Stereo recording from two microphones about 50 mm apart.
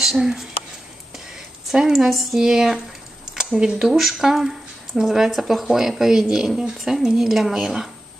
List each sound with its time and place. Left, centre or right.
0.0 s speech: centre
1.7 s a woman's voice: centre
3.8 s speech: centre